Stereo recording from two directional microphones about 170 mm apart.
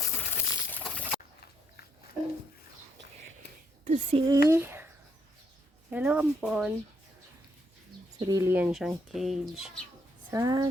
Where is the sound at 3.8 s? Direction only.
40° right (ahead or behind).